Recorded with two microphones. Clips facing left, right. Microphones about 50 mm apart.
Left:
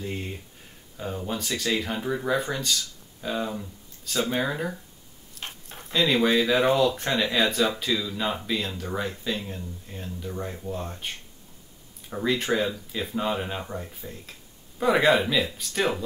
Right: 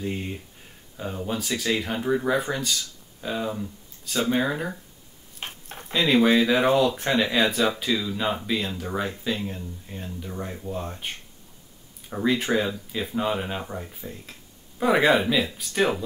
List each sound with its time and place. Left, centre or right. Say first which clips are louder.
0.0 s speech: right 3 dB; centre